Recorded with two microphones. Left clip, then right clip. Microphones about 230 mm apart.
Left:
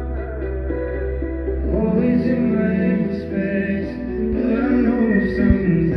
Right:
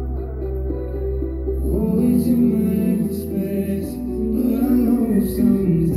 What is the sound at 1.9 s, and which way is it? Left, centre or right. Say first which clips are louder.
Music: right 3 dB; right.